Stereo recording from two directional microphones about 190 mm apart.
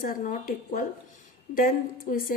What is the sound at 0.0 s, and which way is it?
A woman's voice, 45° left (ahead or behind).